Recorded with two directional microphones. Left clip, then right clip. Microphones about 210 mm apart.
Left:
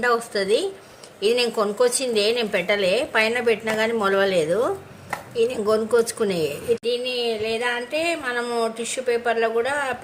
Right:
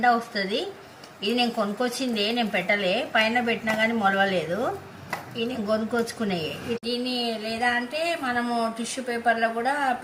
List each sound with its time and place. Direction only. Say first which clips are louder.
0.0 s a woman's voice: left 1 dB; 55° left (ahead or behind)
5.9 s a woman's voice: left 7 dB; 55° left (ahead or behind)
6.8 s speech: left 5 dB; 40° left (ahead or behind)